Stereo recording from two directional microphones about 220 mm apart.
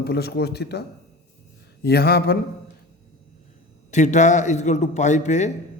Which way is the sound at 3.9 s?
35° left (ahead or behind).